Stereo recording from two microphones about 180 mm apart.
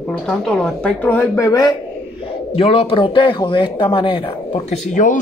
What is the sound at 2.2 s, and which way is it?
Speech, 30° left (ahead or behind).